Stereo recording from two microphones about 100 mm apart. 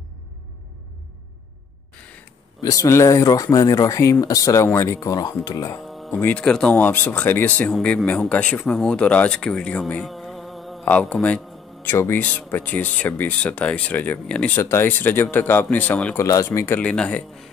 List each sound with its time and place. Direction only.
2.6 s speech: 35° left (ahead or behind)
5.9 s music: centre (ahead or behind)
6.1 s a man's voice: 10° left (ahead or behind)
10.1 s music: centre (ahead or behind)
10.9 s a man's voice: 15° left (ahead or behind)
14.6 s a man's voice: 25° left (ahead or behind)
16.2 s speech: 30° left (ahead or behind)
16.8 s a man's voice: 10° left (ahead or behind)